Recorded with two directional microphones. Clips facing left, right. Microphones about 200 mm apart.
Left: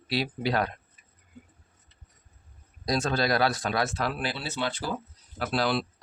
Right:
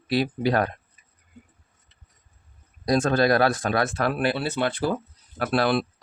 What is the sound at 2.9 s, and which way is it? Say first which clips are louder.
Speech: right 6 dB; 50° right (ahead or behind).